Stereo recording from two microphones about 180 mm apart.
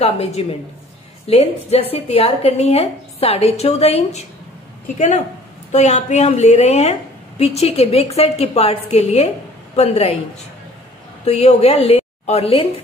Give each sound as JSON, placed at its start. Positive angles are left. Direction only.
{"t": 0.0, "sound": "a woman's voice", "side_deg": 35}
{"t": 11.2, "sound": "a woman's voice", "side_deg": 35}